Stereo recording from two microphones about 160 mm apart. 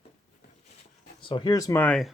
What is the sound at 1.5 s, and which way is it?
Speech, 20° left (ahead or behind).